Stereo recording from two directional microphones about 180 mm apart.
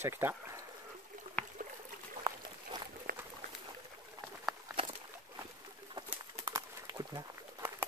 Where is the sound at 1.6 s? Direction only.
45° right (ahead or behind).